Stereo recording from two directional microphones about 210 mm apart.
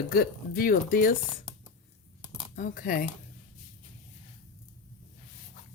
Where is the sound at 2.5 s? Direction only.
40° left (ahead or behind).